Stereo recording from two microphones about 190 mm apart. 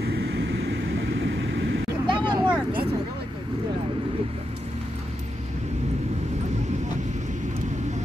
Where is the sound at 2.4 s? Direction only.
5° right (ahead or behind).